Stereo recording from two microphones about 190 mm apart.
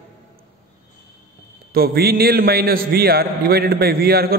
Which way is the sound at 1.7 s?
55° right (ahead or behind).